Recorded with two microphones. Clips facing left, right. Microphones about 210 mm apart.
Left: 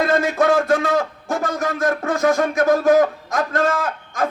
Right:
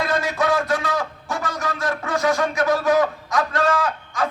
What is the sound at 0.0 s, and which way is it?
A man's voice, 55° left (ahead or behind).